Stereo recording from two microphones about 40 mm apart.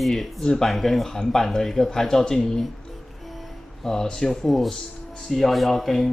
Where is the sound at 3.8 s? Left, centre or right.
Centre.